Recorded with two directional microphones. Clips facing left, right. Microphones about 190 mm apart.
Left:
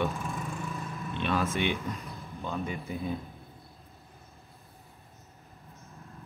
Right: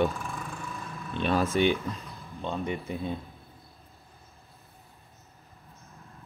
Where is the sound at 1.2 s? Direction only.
35° right (ahead or behind).